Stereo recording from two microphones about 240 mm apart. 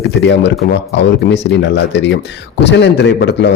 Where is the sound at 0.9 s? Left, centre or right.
Left.